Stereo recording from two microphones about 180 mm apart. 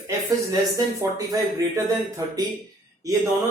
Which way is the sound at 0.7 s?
20° right (ahead or behind).